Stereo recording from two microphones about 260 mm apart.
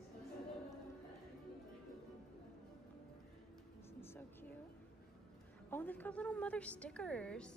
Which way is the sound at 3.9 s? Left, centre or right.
Centre.